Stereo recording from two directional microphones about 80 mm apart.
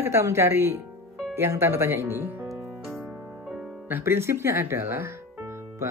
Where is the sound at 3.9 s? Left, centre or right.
Right.